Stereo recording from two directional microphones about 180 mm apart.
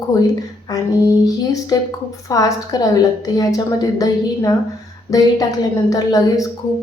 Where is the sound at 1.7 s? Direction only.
20° left (ahead or behind).